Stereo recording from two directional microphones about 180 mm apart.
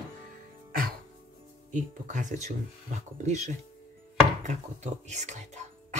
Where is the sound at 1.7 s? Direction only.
45° right (ahead or behind).